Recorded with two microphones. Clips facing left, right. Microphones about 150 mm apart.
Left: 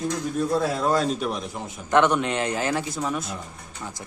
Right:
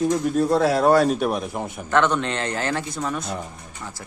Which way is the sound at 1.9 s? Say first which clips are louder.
Left 1 dB; 15° left (ahead or behind).